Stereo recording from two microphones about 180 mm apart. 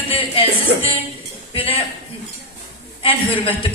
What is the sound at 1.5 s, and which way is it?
Speech, 30° left (ahead or behind).